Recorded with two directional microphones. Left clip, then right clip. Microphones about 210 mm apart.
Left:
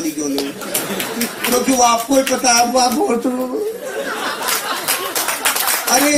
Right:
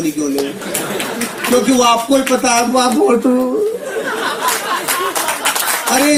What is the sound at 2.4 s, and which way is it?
Speech, 50° right (ahead or behind).